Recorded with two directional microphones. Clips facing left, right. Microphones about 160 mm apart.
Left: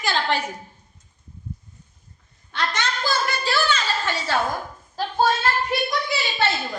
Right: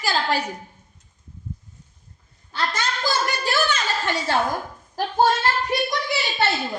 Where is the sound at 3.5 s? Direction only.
15° right (ahead or behind).